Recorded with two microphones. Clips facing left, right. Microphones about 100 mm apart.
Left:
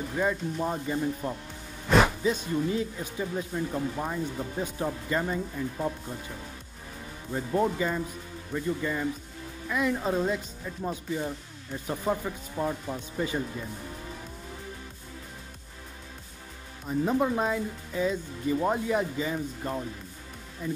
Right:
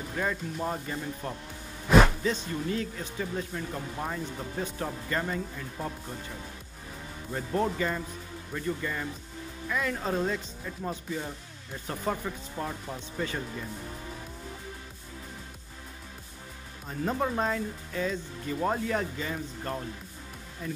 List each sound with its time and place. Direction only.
0.1 s speech: 10° left (ahead or behind)
7.3 s speech: 10° left (ahead or behind)
16.8 s speech: 5° left (ahead or behind)